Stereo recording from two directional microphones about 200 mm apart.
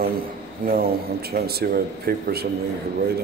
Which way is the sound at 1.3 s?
50° right (ahead or behind).